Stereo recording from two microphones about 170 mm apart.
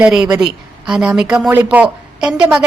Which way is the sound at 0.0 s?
5° right (ahead or behind).